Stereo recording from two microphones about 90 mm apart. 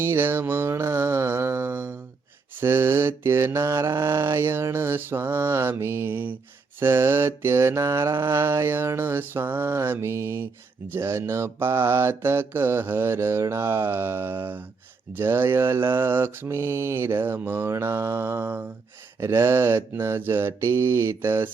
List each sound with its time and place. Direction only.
0.0 s mantra: 25° right (ahead or behind)